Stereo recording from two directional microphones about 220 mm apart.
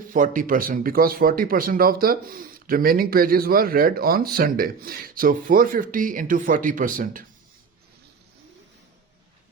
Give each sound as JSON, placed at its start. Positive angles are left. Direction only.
{"t": 0.1, "sound": "a man's voice", "side_deg": -40}